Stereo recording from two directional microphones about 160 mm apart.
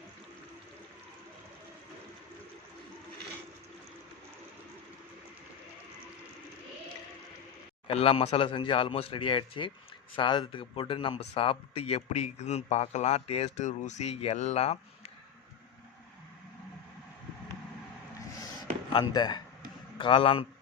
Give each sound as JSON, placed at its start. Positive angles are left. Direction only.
{"t": 7.9, "sound": "speech", "side_deg": 35}
{"t": 18.9, "sound": "speech", "side_deg": 25}